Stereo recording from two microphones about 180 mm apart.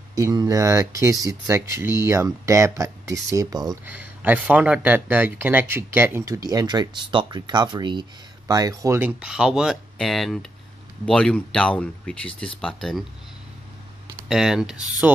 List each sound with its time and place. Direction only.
0.1 s speech: 20° right (ahead or behind)
3.9 s speech: 10° right (ahead or behind)
14.3 s speech: centre (ahead or behind)